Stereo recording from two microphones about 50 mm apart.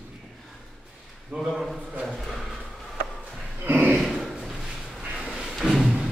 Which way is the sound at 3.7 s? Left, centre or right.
Right.